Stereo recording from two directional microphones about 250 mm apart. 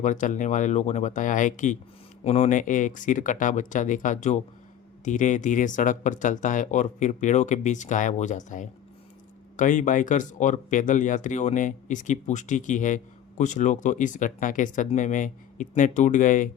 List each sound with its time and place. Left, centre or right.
0.0 s speech: left